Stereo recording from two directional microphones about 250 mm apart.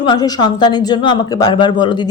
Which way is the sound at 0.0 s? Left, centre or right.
Centre.